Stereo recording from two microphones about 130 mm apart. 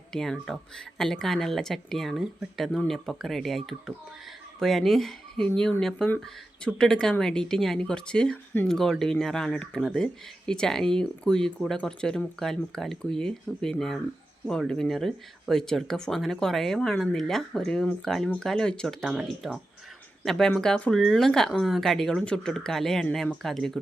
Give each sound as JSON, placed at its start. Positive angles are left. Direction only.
{"t": 0.1, "sound": "speech", "side_deg": 5}